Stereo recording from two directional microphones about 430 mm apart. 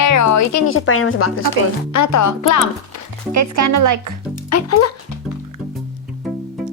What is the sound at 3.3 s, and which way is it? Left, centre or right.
Speech, right.